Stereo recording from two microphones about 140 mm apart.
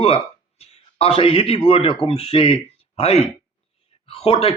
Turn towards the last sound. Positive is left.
turn(degrees=45)  # may be behind; listen again after turning